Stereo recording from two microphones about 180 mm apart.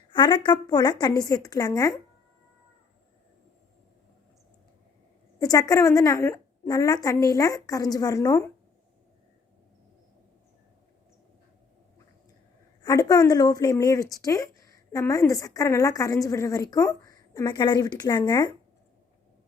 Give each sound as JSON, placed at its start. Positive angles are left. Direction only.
{"t": 0.1, "sound": "speech", "side_deg": 25}
{"t": 5.4, "sound": "speech", "side_deg": 20}
{"t": 12.8, "sound": "speech", "side_deg": 20}